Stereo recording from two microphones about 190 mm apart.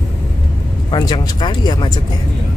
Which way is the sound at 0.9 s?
20° left (ahead or behind).